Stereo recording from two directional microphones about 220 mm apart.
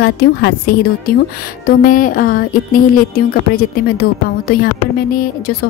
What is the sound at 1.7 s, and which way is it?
Speech, 40° left (ahead or behind).